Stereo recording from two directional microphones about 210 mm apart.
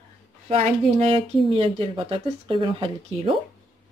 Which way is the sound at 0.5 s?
30° right (ahead or behind).